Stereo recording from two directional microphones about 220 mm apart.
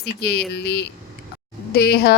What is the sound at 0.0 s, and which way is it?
Speech, 50° left (ahead or behind).